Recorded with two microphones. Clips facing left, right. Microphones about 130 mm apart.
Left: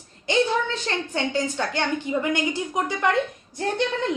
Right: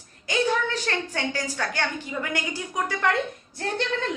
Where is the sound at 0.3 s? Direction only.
25° left (ahead or behind).